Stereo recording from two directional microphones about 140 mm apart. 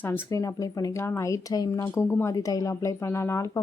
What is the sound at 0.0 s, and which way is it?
A woman's voice, 25° left (ahead or behind).